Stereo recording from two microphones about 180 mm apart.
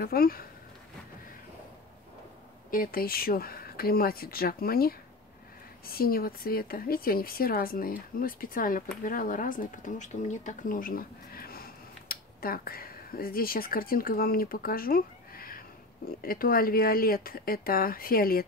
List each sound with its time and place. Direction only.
0.0 s speech: 55° left (ahead or behind)
2.7 s speech: 55° left (ahead or behind)